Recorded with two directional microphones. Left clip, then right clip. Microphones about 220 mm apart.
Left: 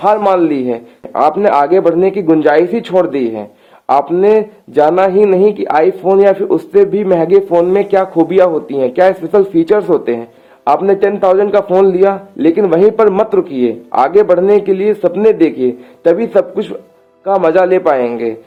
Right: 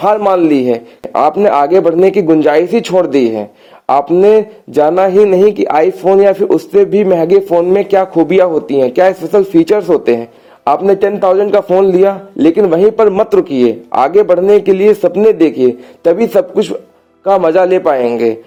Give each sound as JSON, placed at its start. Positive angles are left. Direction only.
{"t": 0.0, "sound": "a man's voice", "side_deg": -30}